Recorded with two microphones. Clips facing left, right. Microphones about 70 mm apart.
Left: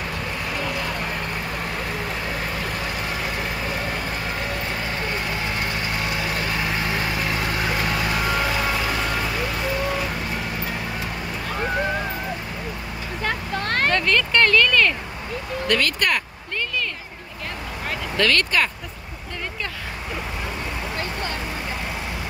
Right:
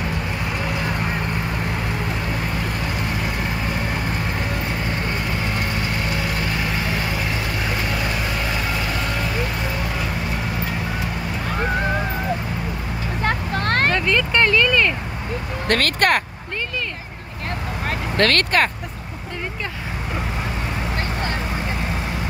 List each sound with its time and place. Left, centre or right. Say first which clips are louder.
13.2 s vehicle: right 3 dB; right
13.9 s vehicle: right 1 dB; centre
15.7 s vehicle: right 4 dB; right
17.8 s vehicle: right 2 dB; right